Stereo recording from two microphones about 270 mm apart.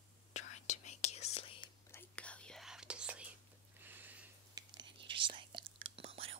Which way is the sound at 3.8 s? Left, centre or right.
Centre.